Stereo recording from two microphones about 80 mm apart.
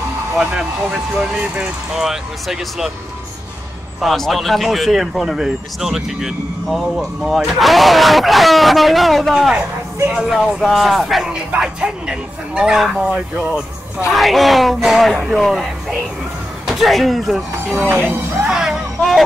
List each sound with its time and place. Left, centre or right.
0.4 s speech: centre
4.0 s speech: centre
11.2 s speech: centre
17.9 s speech: right
18.5 s music: centre